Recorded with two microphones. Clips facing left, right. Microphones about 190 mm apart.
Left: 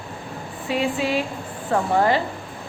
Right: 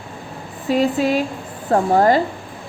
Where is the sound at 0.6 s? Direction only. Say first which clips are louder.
Right 6 dB; 40° right (ahead or behind).